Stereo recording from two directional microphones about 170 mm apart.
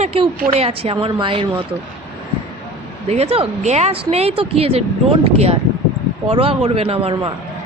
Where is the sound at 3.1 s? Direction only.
35° right (ahead or behind).